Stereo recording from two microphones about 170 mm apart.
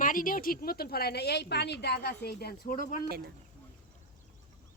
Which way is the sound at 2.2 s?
65° left (ahead or behind).